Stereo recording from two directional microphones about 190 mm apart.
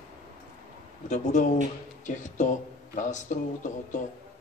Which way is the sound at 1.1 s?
40° left (ahead or behind).